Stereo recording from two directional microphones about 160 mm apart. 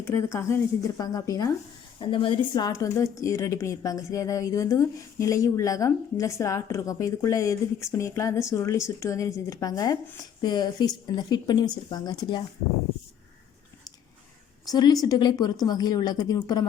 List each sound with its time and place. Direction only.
0.0 s speech: 15° left (ahead or behind)
2.0 s a woman's voice: 30° left (ahead or behind)
14.6 s a woman's voice: 25° left (ahead or behind)